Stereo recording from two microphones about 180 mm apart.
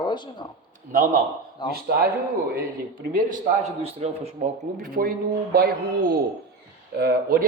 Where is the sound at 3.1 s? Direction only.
50° right (ahead or behind).